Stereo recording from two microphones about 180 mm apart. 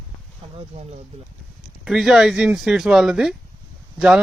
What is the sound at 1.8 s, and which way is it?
Speech, centre (ahead or behind).